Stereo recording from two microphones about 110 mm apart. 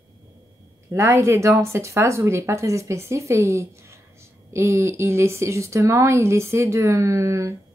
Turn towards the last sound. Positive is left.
turn(degrees=-30)  # may be behind; listen again after turning